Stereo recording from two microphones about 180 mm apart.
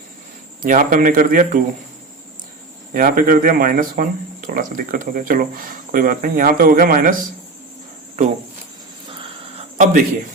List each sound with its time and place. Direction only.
0.6 s speech: 45° right (ahead or behind)
2.9 s speech: 50° right (ahead or behind)
9.7 s speech: 45° right (ahead or behind)